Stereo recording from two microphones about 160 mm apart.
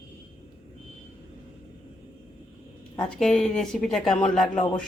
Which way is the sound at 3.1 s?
Centre (ahead or behind).